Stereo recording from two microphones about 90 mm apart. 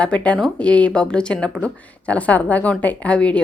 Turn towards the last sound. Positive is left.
turn(degrees=15)  # may be behind; listen again after turning